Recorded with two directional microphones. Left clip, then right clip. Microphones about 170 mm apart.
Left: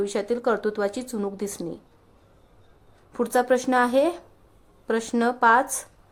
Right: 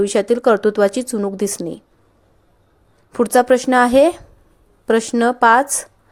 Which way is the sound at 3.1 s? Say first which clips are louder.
Right 8 dB; 30° right (ahead or behind).